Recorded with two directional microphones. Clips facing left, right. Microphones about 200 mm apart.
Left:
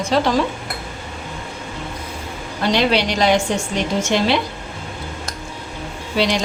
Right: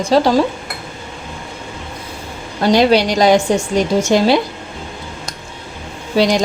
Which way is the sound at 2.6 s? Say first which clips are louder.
Right 6 dB; 40° right (ahead or behind).